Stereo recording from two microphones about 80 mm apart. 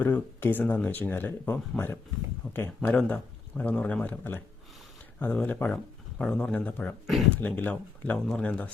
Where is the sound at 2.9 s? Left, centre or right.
Centre.